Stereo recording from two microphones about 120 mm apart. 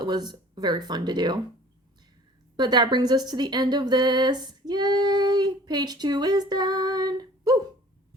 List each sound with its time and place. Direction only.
0.0 s speech: 35° right (ahead or behind)
2.6 s speech: 35° right (ahead or behind)